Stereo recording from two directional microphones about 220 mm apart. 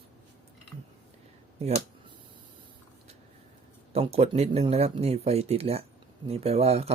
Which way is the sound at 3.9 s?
25° right (ahead or behind).